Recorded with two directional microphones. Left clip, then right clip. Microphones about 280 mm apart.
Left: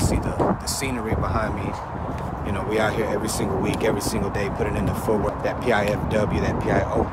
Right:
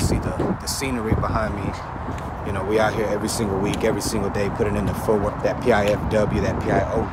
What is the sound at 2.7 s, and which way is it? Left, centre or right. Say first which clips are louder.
Speech: right 2 dB; centre.